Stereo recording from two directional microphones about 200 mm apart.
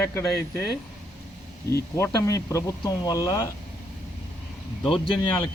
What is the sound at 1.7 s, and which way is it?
Speech, 15° left (ahead or behind).